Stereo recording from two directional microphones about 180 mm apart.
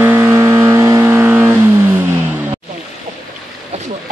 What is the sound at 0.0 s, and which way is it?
Vehicle, 15° right (ahead or behind).